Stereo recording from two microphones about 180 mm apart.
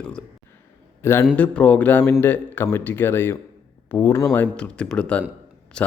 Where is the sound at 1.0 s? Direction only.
15° left (ahead or behind).